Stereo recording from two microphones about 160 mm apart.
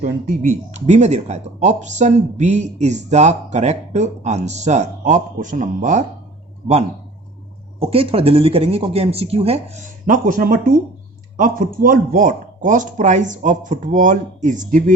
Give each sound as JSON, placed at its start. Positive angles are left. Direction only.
{"t": 0.0, "sound": "speech", "side_deg": -55}
{"t": 7.8, "sound": "speech", "side_deg": -35}